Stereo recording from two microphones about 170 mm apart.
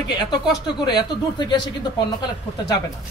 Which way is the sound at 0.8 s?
25° left (ahead or behind).